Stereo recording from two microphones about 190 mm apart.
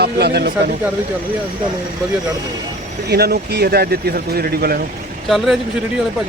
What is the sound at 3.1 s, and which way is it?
Speech, 55° right (ahead or behind).